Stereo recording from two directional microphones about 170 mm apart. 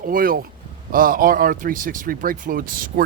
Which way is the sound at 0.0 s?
55° right (ahead or behind).